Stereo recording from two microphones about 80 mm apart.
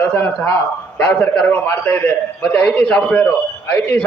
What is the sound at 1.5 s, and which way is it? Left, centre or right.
Speech, left.